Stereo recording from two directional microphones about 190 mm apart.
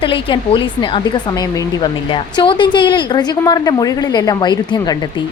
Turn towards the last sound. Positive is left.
turn(degrees=20)  # may be behind; listen again after turning